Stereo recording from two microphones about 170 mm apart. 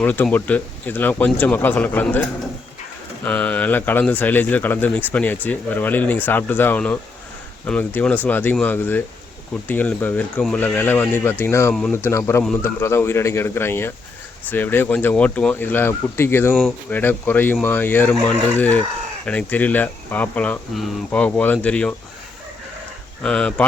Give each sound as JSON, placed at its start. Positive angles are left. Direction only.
{"t": 0.0, "sound": "speech", "side_deg": 10}
{"t": 3.2, "sound": "speech", "side_deg": 10}
{"t": 23.2, "sound": "speech", "side_deg": 5}